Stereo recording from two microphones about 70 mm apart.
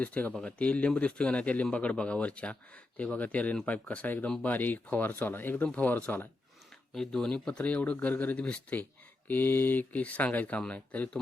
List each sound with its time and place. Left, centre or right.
0.0 s a man's voice: left
6.9 s a man's voice: centre